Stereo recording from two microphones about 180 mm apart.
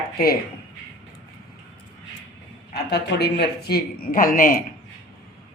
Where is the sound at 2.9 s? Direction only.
65° left (ahead or behind).